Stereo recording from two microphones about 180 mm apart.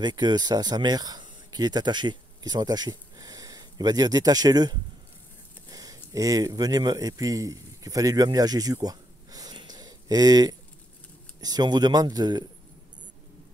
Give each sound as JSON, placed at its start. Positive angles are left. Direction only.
{"t": 0.0, "sound": "speech", "side_deg": -25}
{"t": 5.7, "sound": "a sound", "side_deg": -20}
{"t": 6.1, "sound": "a man's voice", "side_deg": -20}